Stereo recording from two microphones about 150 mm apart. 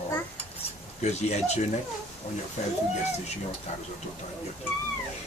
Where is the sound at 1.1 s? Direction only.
45° left (ahead or behind).